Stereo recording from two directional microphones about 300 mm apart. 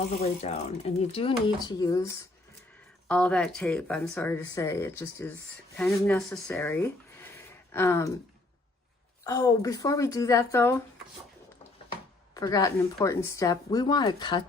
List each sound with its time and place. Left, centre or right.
0.2 s speech: left
7.2 s a sound: centre
9.2 s speech: centre
12.3 s speech: centre